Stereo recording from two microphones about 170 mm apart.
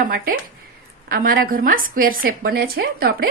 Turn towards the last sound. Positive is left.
turn(degrees=-65)  # may be behind; listen again after turning